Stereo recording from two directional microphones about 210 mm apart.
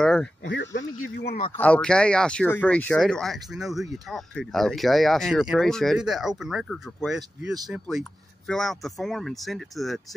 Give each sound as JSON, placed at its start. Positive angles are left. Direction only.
{"t": 0.0, "sound": "a sound", "side_deg": 5}
{"t": 0.5, "sound": "speech", "side_deg": 60}
{"t": 1.6, "sound": "speech", "side_deg": 5}